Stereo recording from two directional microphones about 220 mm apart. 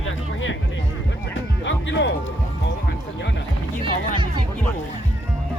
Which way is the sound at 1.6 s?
55° left (ahead or behind).